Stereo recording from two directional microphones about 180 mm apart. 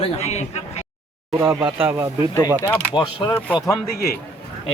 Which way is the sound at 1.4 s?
10° right (ahead or behind).